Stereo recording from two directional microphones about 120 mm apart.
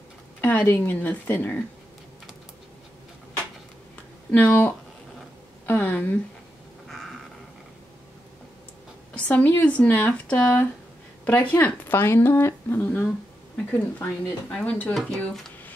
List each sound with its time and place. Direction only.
0.4 s speech: 15° left (ahead or behind)
4.3 s speech: 15° left (ahead or behind)
6.9 s a sound: 5° left (ahead or behind)
9.1 s speech: 15° left (ahead or behind)